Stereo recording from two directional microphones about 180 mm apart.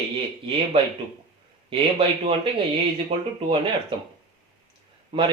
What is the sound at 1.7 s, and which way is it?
Speech, 30° right (ahead or behind).